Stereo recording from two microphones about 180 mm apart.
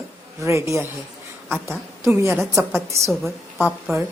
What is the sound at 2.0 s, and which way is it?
A woman's voice, 15° right (ahead or behind).